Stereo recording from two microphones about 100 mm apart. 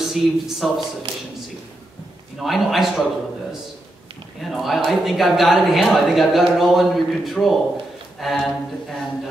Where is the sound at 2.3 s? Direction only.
Centre (ahead or behind).